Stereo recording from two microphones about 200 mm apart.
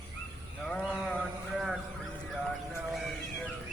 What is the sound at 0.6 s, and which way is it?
Livestock, 5° left (ahead or behind).